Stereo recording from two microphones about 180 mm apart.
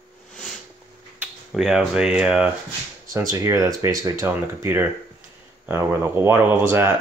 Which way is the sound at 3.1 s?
15° right (ahead or behind).